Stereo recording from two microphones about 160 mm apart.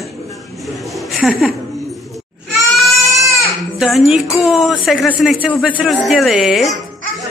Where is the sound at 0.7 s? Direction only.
Centre (ahead or behind).